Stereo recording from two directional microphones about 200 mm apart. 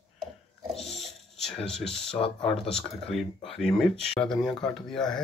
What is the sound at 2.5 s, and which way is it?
Speech, 5° left (ahead or behind).